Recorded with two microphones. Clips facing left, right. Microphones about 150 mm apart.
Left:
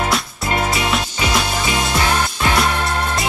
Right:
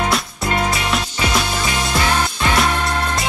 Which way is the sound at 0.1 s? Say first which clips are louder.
Even; centre (ahead or behind).